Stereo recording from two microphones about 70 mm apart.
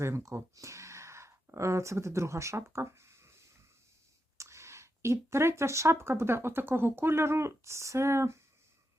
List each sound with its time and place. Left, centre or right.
0.0 s speech: right